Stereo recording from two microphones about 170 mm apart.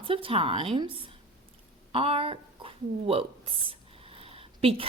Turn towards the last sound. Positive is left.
turn(degrees=-35)  # may be behind; listen again after turning